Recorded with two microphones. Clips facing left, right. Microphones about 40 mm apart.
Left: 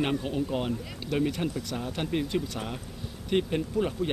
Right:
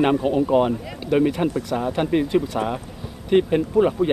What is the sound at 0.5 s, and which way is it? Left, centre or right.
A man's voice, centre.